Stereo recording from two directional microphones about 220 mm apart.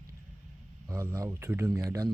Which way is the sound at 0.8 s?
15° right (ahead or behind).